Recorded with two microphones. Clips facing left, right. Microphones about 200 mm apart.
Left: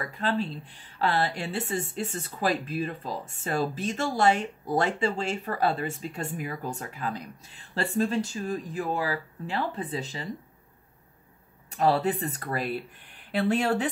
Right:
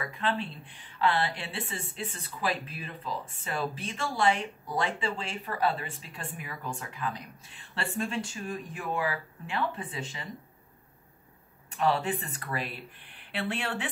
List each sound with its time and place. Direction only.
0.2 s speech: 40° left (ahead or behind)
11.7 s speech: 40° left (ahead or behind)